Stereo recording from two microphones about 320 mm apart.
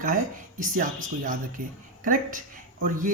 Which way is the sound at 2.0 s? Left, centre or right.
Right.